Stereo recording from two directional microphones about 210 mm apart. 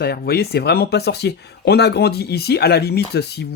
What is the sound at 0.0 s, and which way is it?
Speech, 50° left (ahead or behind).